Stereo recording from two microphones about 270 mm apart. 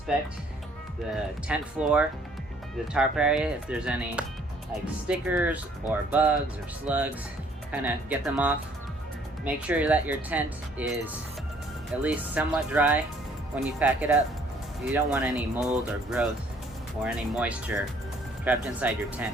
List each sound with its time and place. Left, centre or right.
1.1 s speech: centre